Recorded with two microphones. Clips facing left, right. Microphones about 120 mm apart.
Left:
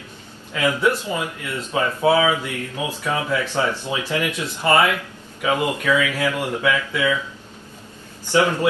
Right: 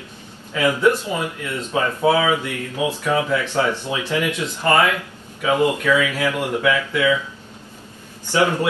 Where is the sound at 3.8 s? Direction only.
15° left (ahead or behind).